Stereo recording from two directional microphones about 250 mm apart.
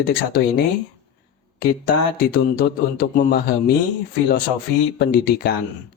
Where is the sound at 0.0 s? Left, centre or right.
Left.